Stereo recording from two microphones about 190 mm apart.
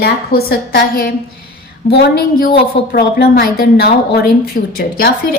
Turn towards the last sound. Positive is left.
turn(degrees=55)  # may be behind; listen again after turning